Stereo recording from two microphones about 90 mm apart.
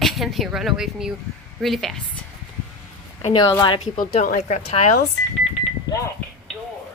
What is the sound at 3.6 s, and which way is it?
Speech, 65° left (ahead or behind).